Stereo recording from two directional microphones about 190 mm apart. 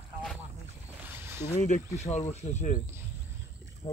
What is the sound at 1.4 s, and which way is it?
Speech, 40° left (ahead or behind).